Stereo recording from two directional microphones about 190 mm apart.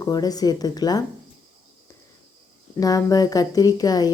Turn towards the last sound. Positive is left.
turn(degrees=20)  # may be behind; listen again after turning